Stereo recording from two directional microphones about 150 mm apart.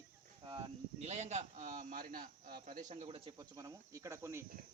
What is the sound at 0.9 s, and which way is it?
A man's voice, 45° right (ahead or behind).